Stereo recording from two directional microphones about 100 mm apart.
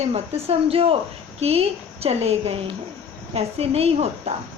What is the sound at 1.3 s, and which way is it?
A woman's voice, 90° right.